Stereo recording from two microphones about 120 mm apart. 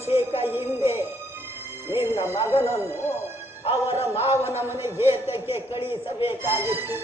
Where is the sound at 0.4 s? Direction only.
20° right (ahead or behind).